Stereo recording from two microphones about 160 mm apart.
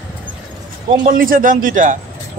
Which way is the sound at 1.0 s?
60° right (ahead or behind).